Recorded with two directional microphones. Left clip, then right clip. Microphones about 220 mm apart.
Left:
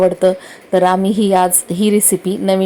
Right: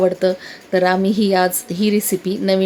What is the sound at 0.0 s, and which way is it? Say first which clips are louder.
A woman's voice: left 4 dB; 10° left (ahead or behind).